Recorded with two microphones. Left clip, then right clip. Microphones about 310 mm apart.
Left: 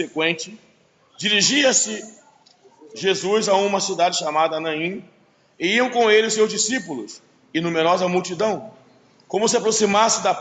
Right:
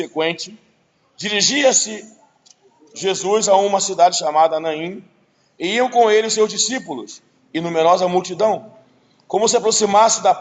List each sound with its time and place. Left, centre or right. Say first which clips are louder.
0.2 s a man's voice: right 2 dB; right
3.0 s a man's voice: right 2 dB; right